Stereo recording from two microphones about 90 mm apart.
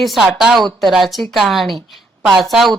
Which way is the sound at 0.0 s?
Centre (ahead or behind).